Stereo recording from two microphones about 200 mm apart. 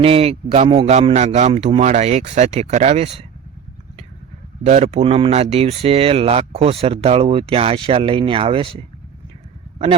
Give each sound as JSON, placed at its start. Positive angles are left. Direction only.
{"t": 0.0, "sound": "a man's voice", "side_deg": -30}
{"t": 4.6, "sound": "speech", "side_deg": -35}